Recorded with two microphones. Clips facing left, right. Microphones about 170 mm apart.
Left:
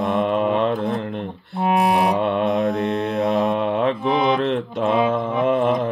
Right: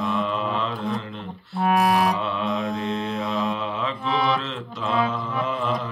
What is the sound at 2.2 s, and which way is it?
Mantra, 50° left (ahead or behind).